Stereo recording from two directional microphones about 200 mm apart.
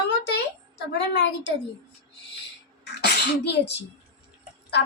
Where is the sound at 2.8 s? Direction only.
55° left (ahead or behind).